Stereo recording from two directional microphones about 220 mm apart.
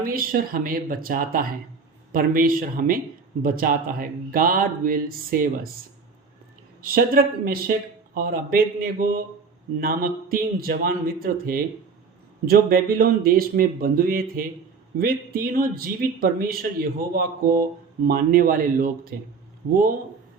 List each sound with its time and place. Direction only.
0.0 s speech: 40° right (ahead or behind)
6.8 s speech: 40° right (ahead or behind)